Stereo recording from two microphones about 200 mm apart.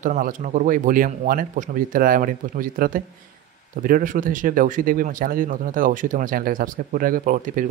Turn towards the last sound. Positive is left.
turn(degrees=-45)  # may be behind; listen again after turning